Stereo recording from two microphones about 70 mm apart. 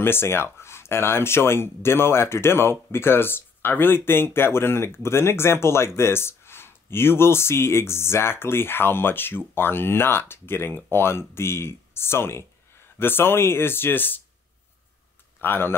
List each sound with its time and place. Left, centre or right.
0.0 s speech: left
15.4 s speech: left